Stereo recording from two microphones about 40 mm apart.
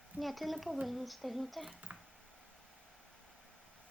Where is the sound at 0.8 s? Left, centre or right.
Centre.